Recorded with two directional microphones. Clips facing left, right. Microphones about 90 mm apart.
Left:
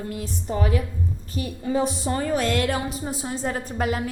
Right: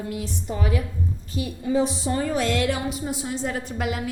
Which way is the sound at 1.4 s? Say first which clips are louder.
Right 1 dB; 50° left (ahead or behind).